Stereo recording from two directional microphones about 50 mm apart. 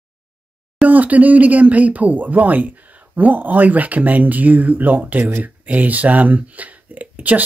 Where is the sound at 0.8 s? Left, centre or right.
Right.